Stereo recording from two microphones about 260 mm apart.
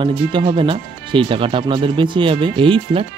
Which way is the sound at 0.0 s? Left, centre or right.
Centre.